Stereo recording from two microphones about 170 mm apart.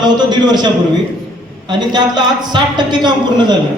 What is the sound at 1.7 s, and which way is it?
A man's voice, 25° right (ahead or behind).